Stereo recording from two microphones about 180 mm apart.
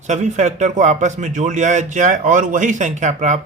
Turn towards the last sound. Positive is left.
turn(degrees=-40)  # may be behind; listen again after turning